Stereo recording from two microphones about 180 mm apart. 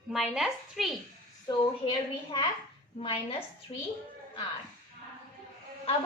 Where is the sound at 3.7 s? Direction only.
30° left (ahead or behind).